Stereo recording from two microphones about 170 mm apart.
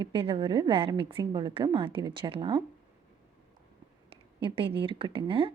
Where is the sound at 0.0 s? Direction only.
30° right (ahead or behind).